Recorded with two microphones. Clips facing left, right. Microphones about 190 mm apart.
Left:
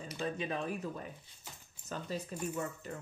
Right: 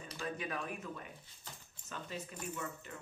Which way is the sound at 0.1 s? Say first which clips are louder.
Left 4 dB; 25° left (ahead or behind).